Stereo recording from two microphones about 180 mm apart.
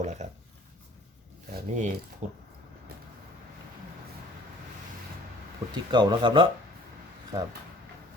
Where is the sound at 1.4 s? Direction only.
45° right (ahead or behind).